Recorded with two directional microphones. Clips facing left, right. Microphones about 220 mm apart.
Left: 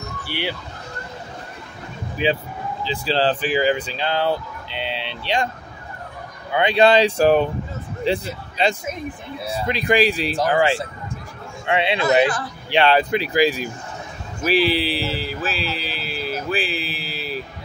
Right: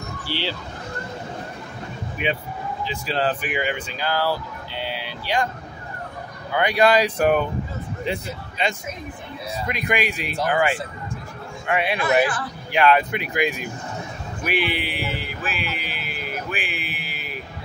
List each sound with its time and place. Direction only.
0.3 s speech: 15° left (ahead or behind)
2.2 s speech: 30° left (ahead or behind)
6.5 s speech: 25° left (ahead or behind)